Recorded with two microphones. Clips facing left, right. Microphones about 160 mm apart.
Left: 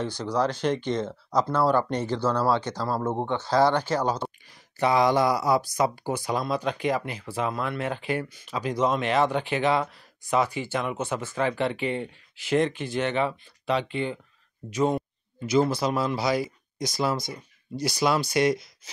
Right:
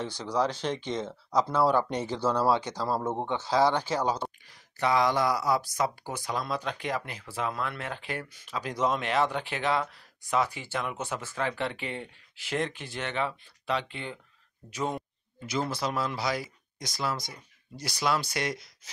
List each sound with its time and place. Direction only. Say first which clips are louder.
0.0 s speech: left 3 dB; 5° right (ahead or behind)
4.7 s speech: left 4 dB; 15° left (ahead or behind); by 14.2 s centre (ahead or behind)
15.9 s speech: left 5 dB; 10° left (ahead or behind)